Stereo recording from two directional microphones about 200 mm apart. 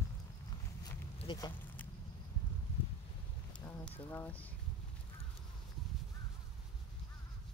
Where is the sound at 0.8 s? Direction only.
20° left (ahead or behind).